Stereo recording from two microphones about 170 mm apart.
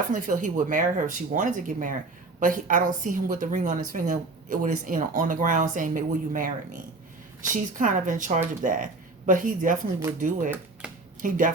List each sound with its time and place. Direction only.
0.1 s speech: 50° right (ahead or behind)